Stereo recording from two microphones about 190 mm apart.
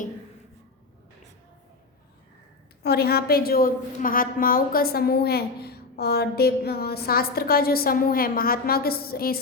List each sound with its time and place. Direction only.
2.8 s a woman's voice: 55° left (ahead or behind)